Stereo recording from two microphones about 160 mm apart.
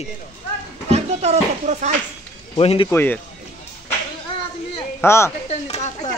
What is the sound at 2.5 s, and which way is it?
Speech, 35° left (ahead or behind).